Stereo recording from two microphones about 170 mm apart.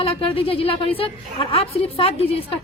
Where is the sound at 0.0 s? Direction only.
35° left (ahead or behind).